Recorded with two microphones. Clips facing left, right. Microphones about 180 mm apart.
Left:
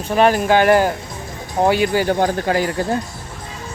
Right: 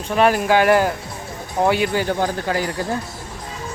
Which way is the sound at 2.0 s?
40° left (ahead or behind).